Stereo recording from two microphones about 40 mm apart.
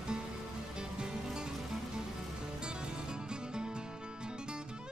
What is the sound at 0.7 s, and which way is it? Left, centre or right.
Music, right.